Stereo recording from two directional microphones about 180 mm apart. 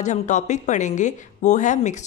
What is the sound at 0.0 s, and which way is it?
A woman's voice, 40° left (ahead or behind).